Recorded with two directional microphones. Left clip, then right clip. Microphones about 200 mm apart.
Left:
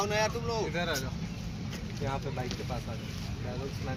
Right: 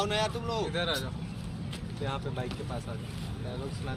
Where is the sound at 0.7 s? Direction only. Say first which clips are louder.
Right 2 dB; 35° left (ahead or behind).